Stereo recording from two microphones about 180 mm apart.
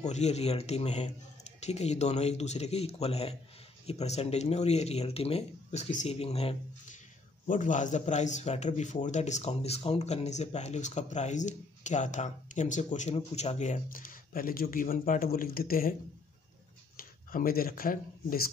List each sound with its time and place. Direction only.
0.0 s a man's voice: 40° left (ahead or behind)
7.4 s a man's voice: 45° left (ahead or behind)